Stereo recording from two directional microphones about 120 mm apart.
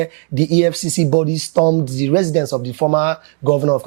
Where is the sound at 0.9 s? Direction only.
20° right (ahead or behind).